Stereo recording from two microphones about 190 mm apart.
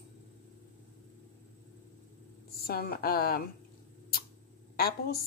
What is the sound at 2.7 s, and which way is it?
Speech, 55° left (ahead or behind).